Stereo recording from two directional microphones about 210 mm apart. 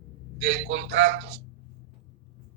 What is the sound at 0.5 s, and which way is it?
Speech, 60° right (ahead or behind).